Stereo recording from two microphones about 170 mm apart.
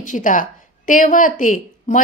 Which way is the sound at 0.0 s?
50° left (ahead or behind).